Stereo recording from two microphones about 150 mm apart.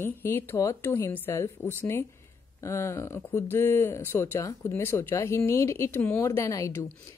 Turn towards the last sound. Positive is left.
turn(degrees=20)  # may be behind; listen again after turning